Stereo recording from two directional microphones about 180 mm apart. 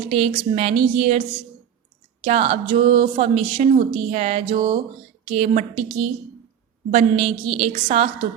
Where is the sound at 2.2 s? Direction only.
35° right (ahead or behind).